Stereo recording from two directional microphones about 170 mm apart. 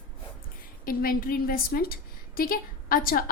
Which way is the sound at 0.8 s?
60° left (ahead or behind).